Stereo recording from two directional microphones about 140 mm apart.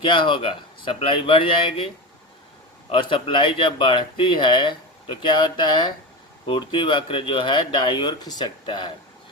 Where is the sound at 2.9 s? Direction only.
40° left (ahead or behind).